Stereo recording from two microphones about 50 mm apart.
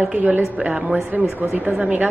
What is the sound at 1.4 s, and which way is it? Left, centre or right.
Speech, right.